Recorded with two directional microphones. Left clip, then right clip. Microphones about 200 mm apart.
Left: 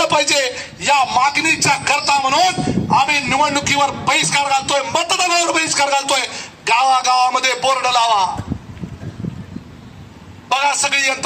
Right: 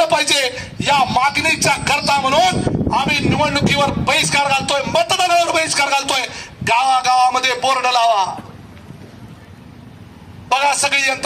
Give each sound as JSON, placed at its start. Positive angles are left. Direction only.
{"t": 0.0, "sound": "speech", "side_deg": -35}
{"t": 10.5, "sound": "speech", "side_deg": -35}